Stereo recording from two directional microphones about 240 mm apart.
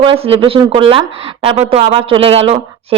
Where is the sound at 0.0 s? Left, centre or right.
Right.